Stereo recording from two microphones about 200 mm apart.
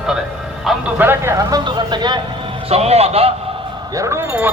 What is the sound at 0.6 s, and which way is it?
A man's voice, 10° right (ahead or behind).